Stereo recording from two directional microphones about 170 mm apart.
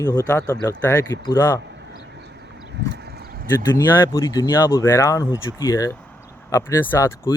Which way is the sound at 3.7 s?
15° left (ahead or behind).